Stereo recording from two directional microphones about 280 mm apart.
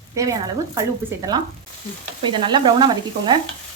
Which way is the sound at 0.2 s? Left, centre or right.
Centre.